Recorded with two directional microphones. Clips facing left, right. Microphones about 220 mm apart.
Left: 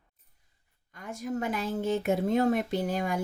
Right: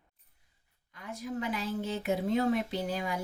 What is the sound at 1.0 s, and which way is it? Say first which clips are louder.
Speech: left 3 dB; 45° left (ahead or behind).